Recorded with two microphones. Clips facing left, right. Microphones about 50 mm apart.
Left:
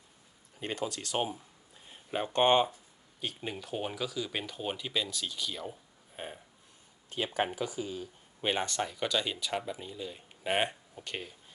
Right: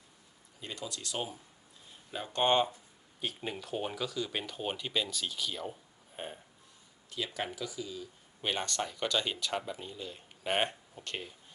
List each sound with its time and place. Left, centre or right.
0.6 s speech: left; by 2.7 s centre
3.2 s speech: centre
7.3 s speech: left
8.4 s speech: centre